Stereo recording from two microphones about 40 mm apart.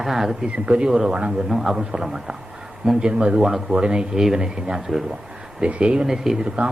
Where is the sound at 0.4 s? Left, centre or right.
Right.